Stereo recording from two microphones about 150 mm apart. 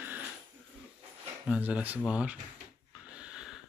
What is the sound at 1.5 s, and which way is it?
Speech, 10° right (ahead or behind).